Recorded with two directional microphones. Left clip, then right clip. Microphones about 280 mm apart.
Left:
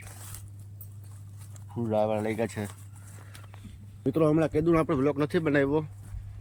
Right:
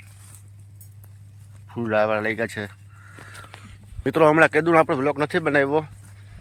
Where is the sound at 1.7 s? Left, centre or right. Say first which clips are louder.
Right 6 dB; right.